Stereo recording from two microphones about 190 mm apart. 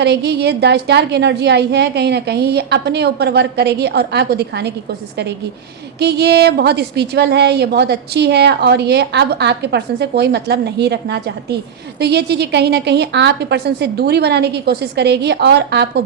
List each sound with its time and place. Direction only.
0.0 s a woman's voice: 60° right (ahead or behind)
6.0 s a woman's voice: 60° right (ahead or behind)